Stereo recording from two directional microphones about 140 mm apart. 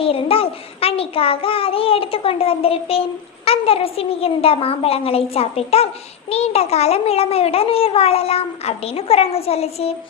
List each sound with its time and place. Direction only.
0.0 s a child's voice: 40° left (ahead or behind)